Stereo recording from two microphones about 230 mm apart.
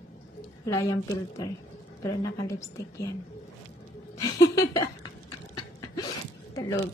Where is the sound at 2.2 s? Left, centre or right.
Centre.